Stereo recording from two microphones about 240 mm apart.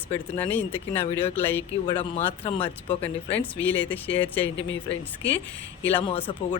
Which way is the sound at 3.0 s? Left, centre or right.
Centre.